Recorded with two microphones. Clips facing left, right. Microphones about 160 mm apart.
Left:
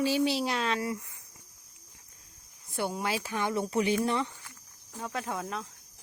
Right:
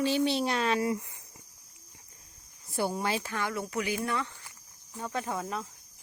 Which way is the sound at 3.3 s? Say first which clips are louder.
Left 3 dB; 20° left (ahead or behind).